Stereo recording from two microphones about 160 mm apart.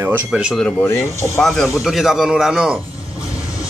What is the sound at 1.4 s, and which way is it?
A man's voice, centre (ahead or behind).